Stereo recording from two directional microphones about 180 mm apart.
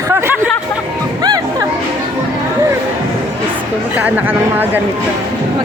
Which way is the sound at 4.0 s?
10° right (ahead or behind).